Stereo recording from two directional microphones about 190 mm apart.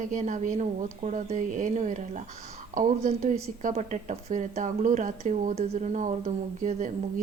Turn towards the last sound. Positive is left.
turn(degrees=-45)  # may be behind; listen again after turning